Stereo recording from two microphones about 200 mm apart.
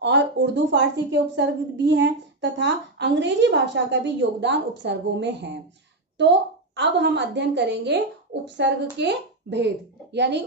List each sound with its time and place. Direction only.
0.0 s a woman's voice: 60° right (ahead or behind)